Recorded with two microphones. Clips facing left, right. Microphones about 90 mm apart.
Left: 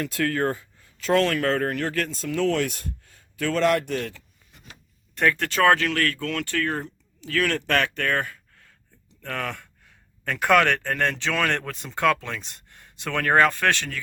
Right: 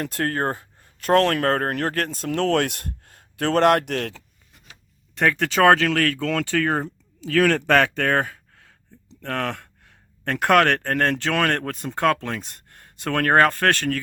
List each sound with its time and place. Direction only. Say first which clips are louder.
0.0 s speech: even; 45° right (ahead or behind); by 4.2 s 70° right (ahead or behind)
5.2 s speech: right 3 dB; 90° right
9.2 s speech: right 4 dB; 65° right (ahead or behind)
10.2 s speech: right 2 dB; 55° right (ahead or behind)